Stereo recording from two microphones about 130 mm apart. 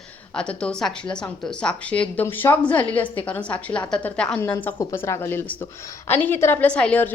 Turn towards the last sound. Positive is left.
turn(degrees=10)  # may be behind; listen again after turning